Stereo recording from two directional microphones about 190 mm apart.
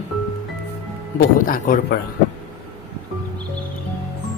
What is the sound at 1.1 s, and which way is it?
Speech, 50° left (ahead or behind).